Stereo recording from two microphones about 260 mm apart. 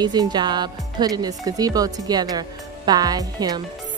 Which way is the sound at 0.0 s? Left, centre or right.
Centre.